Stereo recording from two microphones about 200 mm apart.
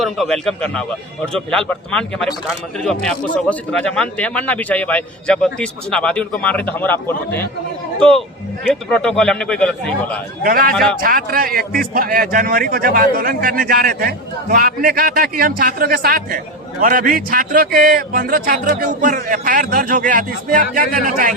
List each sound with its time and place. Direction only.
0.0 s a man's voice: centre (ahead or behind)
9.0 s a man's voice: 5° left (ahead or behind)
10.4 s a man's voice: 45° right (ahead or behind)